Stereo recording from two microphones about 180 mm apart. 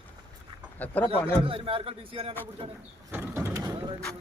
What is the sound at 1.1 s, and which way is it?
Speech, 30° right (ahead or behind).